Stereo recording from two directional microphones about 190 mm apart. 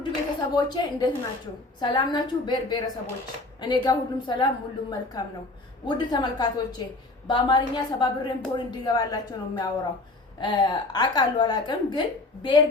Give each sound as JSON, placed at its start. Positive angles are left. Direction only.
{"t": 0.5, "sound": "a woman's voice", "side_deg": 20}